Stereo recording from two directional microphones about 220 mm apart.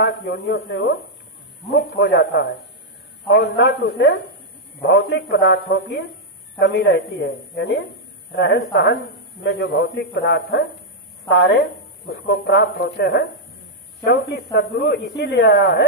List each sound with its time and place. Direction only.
0.0 s a man's voice: 45° left (ahead or behind)